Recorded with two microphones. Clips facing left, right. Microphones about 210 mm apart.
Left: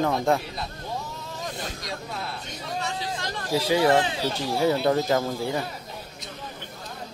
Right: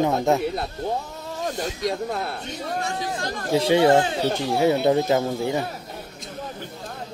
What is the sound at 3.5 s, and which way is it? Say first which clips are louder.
Speech: right 4 dB; 25° right (ahead or behind).